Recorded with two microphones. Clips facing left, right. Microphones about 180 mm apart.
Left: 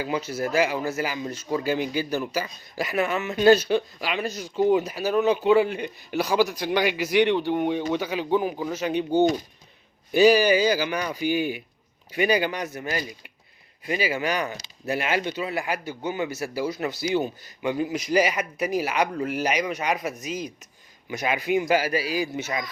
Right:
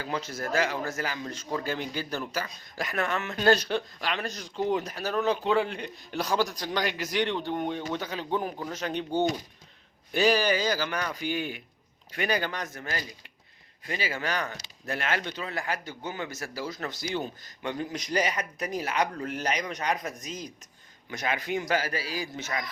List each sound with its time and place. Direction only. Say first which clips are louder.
0.0 s speech: left 6 dB; 10° left (ahead or behind)